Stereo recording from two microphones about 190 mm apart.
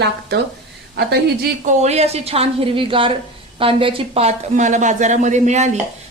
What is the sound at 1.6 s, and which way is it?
A woman's voice, 35° right (ahead or behind).